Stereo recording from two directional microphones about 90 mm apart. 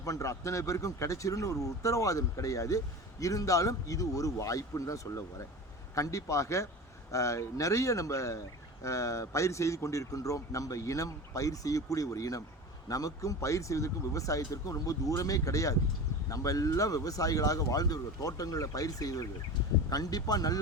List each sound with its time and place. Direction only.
0.0 s speech: 35° left (ahead or behind)